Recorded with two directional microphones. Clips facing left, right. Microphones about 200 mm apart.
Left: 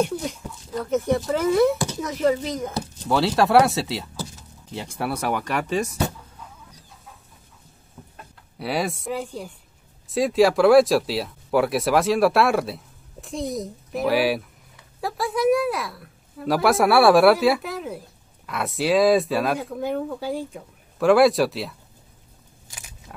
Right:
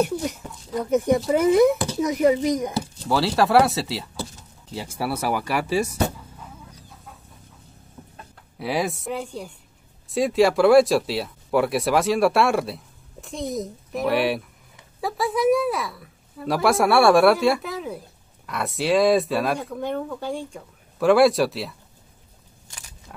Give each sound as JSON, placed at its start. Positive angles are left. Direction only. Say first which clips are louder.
{"t": 0.0, "sound": "speech", "louder": "right 1 dB", "side_deg": -5}
{"t": 3.1, "sound": "speech", "louder": "left 1 dB", "side_deg": 0}
{"t": 8.5, "sound": "speech", "louder": "right 1 dB", "side_deg": 0}
{"t": 22.7, "sound": "a sound", "louder": "left 1 dB", "side_deg": 5}